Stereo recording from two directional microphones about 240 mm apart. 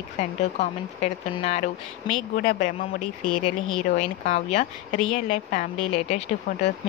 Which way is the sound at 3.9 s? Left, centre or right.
Left.